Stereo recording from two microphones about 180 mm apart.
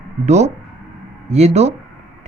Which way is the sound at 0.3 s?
40° right (ahead or behind).